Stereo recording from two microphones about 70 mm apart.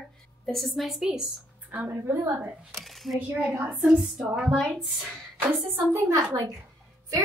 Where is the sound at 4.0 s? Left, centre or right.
Centre.